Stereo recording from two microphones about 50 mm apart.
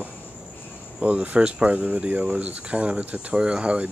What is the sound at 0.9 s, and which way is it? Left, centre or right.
Speech, right.